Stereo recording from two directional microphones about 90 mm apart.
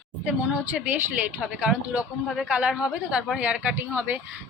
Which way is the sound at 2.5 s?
15° right (ahead or behind).